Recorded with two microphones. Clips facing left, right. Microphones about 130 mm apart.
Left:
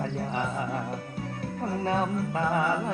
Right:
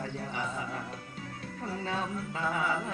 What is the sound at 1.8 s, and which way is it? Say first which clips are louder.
Music: left 8 dB; 55° left (ahead or behind).